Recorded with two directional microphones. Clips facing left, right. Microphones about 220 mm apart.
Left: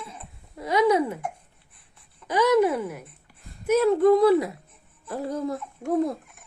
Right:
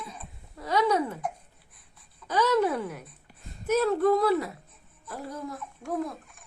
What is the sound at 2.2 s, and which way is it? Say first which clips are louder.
Speech: left 4 dB; 15° left (ahead or behind).